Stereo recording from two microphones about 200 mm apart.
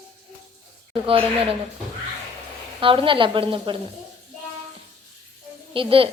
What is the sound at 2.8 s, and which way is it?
Speech, 25° right (ahead or behind).